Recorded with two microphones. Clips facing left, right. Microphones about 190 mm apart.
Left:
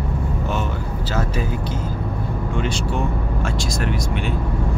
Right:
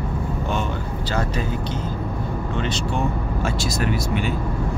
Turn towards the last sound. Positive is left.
turn(degrees=-5)  # may be behind; listen again after turning